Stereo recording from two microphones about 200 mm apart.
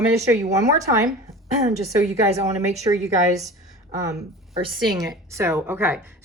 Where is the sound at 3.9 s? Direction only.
15° right (ahead or behind).